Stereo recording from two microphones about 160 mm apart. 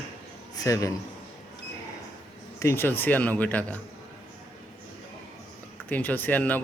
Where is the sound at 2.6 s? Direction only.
15° left (ahead or behind).